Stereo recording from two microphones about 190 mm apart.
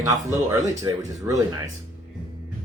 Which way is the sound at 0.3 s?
15° right (ahead or behind).